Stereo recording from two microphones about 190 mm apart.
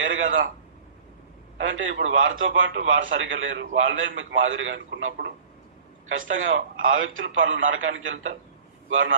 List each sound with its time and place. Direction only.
0.0 s a man's voice: 90° right
1.6 s a man's voice: 85° right
6.1 s a man's voice: 90° right